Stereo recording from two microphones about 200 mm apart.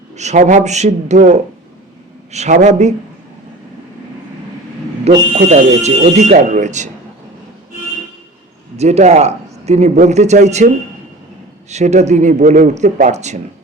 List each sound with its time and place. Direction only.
0.2 s speech: 35° right (ahead or behind)
5.0 s speech: 35° right (ahead or behind)
8.7 s a man's voice: 35° right (ahead or behind)
11.7 s speech: 35° right (ahead or behind)